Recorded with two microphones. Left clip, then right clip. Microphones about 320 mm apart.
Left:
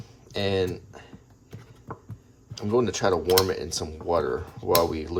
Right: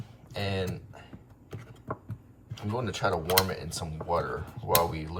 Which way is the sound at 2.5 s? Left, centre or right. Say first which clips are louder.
Left 9 dB; centre.